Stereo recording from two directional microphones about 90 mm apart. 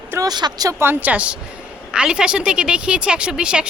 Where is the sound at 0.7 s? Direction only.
25° right (ahead or behind); by 3.7 s 10° right (ahead or behind).